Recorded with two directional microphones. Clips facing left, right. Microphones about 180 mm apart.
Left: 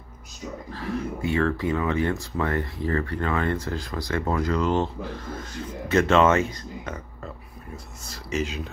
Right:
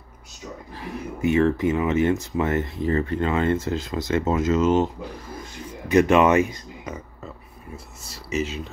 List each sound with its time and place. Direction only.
0.7 s speech: 15° right (ahead or behind)
8.1 s speech: 5° right (ahead or behind)